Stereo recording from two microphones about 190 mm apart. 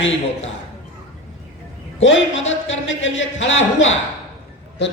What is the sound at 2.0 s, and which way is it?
Speech, 85° left.